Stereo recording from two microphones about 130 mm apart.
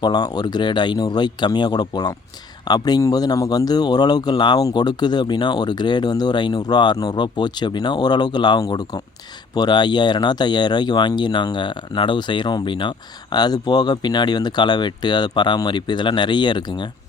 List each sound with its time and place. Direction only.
0.0 s speech: 30° left (ahead or behind)